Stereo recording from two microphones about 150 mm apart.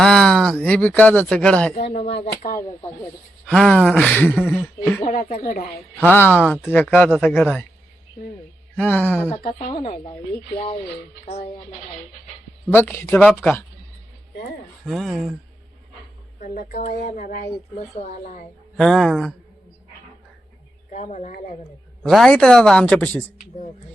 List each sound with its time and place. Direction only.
0.0 s speech: 5° left (ahead or behind)
1.7 s speech: 60° left (ahead or behind)
3.4 s speech: 5° left (ahead or behind)
5.0 s speech: 55° left (ahead or behind)
6.0 s speech: 10° left (ahead or behind)
8.7 s speech: 10° left (ahead or behind)
9.5 s speech: 40° left (ahead or behind)
12.7 s speech: 15° left (ahead or behind)
14.8 s speech: centre (ahead or behind)
16.4 s speech: 60° left (ahead or behind)
18.8 s speech: 5° left (ahead or behind)
20.9 s speech: 60° left (ahead or behind)
22.0 s speech: centre (ahead or behind)